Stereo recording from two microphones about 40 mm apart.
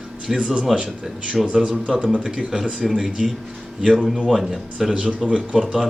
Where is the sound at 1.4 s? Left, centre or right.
Right.